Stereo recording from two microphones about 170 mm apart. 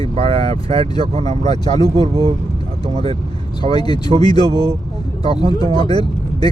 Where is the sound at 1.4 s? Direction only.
25° left (ahead or behind).